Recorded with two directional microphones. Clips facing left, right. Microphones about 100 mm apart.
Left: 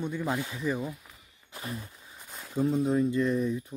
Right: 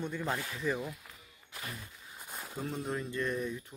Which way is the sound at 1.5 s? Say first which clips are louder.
Left 6 dB; 30° left (ahead or behind).